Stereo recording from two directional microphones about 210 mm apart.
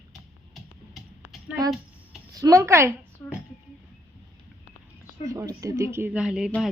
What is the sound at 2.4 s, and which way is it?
Speech, 15° right (ahead or behind).